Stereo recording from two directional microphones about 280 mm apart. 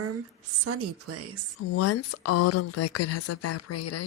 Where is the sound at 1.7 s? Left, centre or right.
Left.